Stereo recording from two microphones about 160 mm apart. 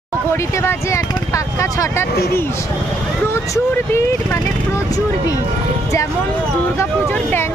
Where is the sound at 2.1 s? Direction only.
80° left.